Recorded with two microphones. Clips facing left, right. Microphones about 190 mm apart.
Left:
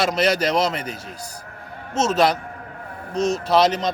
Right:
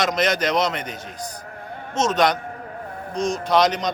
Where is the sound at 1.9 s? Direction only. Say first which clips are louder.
Left 1 dB; 5° left (ahead or behind).